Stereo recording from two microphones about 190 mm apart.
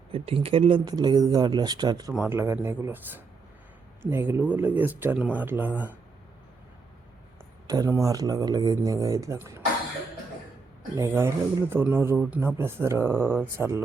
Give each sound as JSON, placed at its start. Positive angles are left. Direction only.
{"t": 0.1, "sound": "speech", "side_deg": -30}
{"t": 2.1, "sound": "speech", "side_deg": -10}
{"t": 7.7, "sound": "speech", "side_deg": -15}
{"t": 10.9, "sound": "speech", "side_deg": -15}